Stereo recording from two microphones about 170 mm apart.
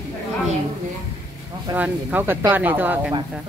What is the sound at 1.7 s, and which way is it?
Speech, 10° right (ahead or behind).